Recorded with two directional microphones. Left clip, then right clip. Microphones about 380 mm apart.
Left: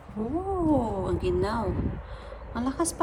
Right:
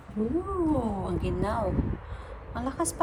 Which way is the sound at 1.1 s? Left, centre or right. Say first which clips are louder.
Left 3 dB; centre.